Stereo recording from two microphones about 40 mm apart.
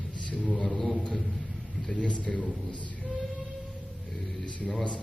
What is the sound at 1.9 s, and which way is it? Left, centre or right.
Speech, left.